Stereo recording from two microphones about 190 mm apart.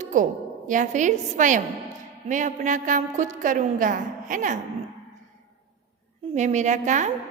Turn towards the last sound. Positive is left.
turn(degrees=-40)  # may be behind; listen again after turning